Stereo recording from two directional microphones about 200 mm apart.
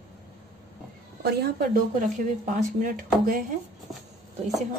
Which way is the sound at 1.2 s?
55° right (ahead or behind).